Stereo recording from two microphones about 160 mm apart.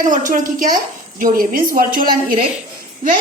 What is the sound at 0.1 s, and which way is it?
A woman's voice, 55° right (ahead or behind).